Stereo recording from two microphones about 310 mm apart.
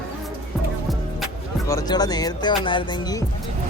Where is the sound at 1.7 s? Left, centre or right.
Centre.